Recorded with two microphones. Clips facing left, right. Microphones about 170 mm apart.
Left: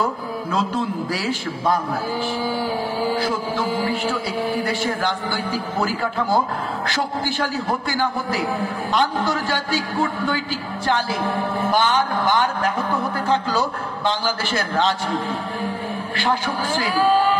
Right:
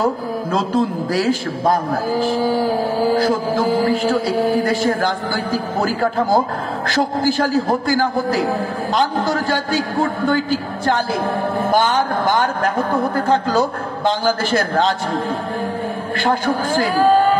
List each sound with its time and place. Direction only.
0.0 s a man's voice: 40° right (ahead or behind)